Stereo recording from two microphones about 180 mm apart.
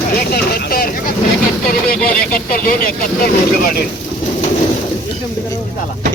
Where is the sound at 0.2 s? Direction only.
60° left (ahead or behind).